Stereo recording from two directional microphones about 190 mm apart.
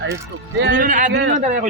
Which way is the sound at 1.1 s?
65° right (ahead or behind).